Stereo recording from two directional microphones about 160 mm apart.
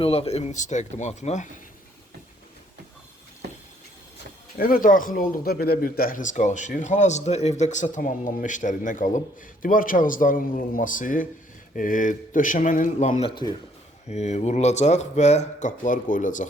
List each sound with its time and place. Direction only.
0.0 s speech: 40° left (ahead or behind)
4.5 s speech: 65° left (ahead or behind); by 13.2 s 50° left (ahead or behind)
13.2 s speech: 30° left (ahead or behind)
14.1 s speech: 45° left (ahead or behind)